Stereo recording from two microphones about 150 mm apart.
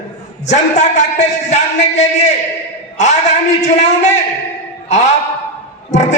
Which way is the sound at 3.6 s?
50° left (ahead or behind).